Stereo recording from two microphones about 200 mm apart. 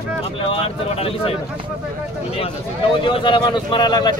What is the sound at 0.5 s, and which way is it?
Speech, 30° left (ahead or behind).